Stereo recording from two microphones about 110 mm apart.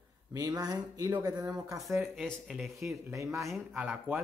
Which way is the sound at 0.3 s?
35° right (ahead or behind).